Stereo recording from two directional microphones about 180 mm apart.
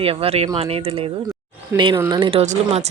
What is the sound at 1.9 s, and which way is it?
Speech, 15° right (ahead or behind).